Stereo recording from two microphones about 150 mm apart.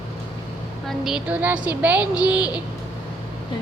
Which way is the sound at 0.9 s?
5° right (ahead or behind).